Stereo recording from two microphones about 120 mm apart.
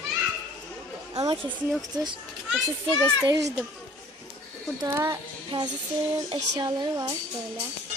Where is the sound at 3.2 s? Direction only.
25° right (ahead or behind).